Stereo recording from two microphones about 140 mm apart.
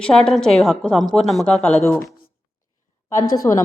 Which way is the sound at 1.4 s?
10° left (ahead or behind).